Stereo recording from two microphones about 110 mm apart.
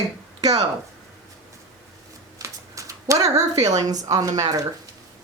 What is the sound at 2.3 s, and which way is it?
Speech, 30° right (ahead or behind).